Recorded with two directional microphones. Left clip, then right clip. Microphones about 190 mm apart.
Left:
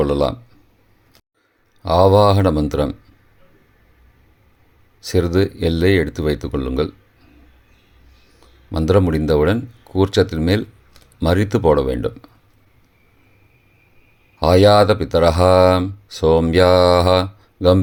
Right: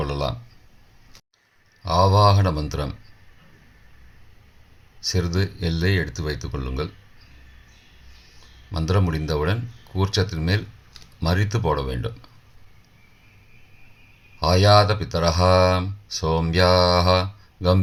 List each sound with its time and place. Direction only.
0.0 s speech: 40° left (ahead or behind)
1.8 s speech: 45° left (ahead or behind)
5.0 s speech: 45° left (ahead or behind)
8.7 s speech: 45° left (ahead or behind)
14.3 s speech: 45° left (ahead or behind)